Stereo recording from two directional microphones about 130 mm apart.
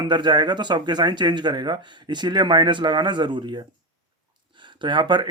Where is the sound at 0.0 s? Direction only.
35° right (ahead or behind).